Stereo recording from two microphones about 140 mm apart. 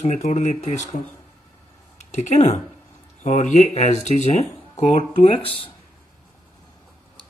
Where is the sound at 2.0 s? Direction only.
55° left (ahead or behind).